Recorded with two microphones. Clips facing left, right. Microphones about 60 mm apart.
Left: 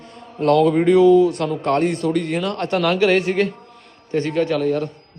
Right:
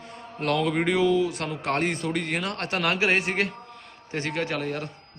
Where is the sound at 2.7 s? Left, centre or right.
Centre.